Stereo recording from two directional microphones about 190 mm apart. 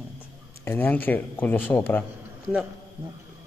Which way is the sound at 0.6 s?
10° left (ahead or behind).